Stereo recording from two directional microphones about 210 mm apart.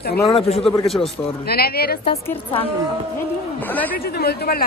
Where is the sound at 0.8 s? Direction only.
Centre (ahead or behind).